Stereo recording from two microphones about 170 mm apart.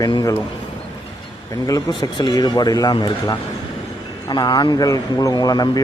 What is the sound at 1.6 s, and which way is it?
A man's voice, 25° left (ahead or behind).